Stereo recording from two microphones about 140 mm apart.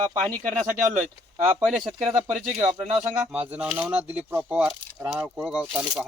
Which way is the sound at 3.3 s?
10° right (ahead or behind).